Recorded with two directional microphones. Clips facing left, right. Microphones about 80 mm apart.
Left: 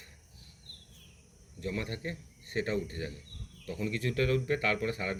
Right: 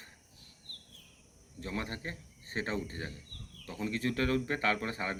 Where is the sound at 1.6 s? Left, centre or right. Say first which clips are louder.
Left 2 dB; right.